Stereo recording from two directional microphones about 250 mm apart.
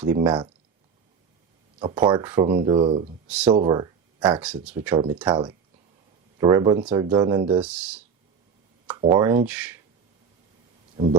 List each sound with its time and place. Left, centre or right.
0.0 s speech: centre
1.8 s speech: centre
3.2 s speech: centre
3.5 s speech: centre
4.4 s speech: centre
5.3 s speech: centre
7.6 s speech: centre
10.9 s speech: right